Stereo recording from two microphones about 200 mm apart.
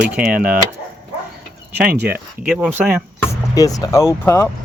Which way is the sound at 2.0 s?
5° right (ahead or behind).